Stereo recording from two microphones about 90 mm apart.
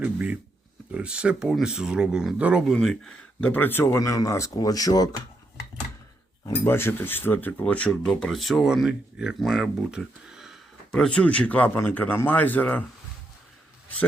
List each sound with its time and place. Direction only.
0.0 s speech: 15° right (ahead or behind)
2.6 s speech: 5° left (ahead or behind)
3.4 s speech: 20° left (ahead or behind); by 5.0 s 45° left (ahead or behind)
6.5 s speech: 25° left (ahead or behind)
7.6 s speech: 10° left (ahead or behind); by 10.6 s 5° right (ahead or behind)
10.9 s speech: 10° left (ahead or behind)